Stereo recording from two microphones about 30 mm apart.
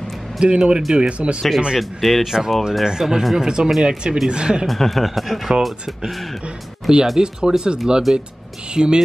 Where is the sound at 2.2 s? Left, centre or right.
Centre.